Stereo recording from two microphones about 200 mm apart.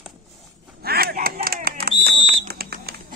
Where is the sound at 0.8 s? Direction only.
50° right (ahead or behind).